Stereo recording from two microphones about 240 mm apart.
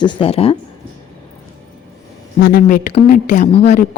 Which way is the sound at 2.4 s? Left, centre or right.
Left.